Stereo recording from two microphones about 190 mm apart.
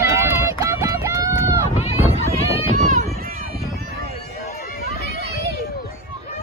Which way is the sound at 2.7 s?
40° right (ahead or behind).